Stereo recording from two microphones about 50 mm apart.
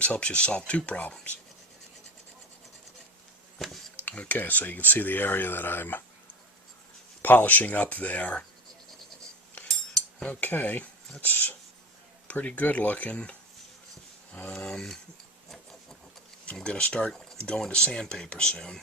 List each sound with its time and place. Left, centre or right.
0.0 s speech: left
3.6 s dishes: centre
3.9 s a sound: left
4.4 s speech: left
7.2 s speech: left
10.4 s speech: left
14.5 s speech: centre
16.6 s speech: left
17.1 s a sound: centre
17.7 s speech: left